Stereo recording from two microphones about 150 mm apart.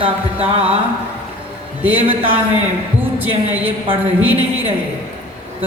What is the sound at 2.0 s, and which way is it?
Music, 35° right (ahead or behind).